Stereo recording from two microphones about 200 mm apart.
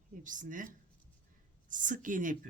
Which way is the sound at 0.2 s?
40° right (ahead or behind).